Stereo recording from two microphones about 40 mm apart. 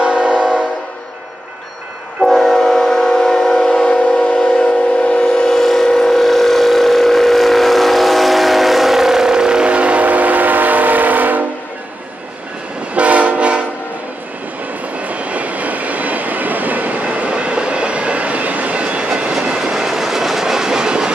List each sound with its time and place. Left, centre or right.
0.0 s train: right
2.2 s train: centre; by 4.6 s left
5.1 s a sound: centre; by 11.4 s right
12.9 s train: right
15.0 s train: right
19.5 s train: centre